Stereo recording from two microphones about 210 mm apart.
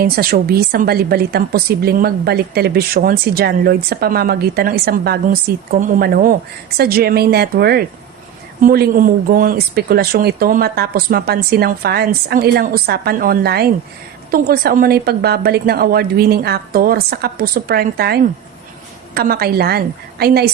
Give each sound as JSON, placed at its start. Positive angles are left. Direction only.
{"t": 0.0, "sound": "speech", "side_deg": -45}